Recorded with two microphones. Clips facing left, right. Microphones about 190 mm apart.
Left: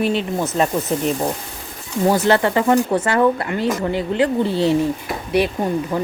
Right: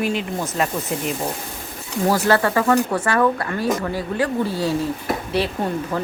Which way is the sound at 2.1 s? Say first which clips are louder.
Left 2 dB; 20° left (ahead or behind).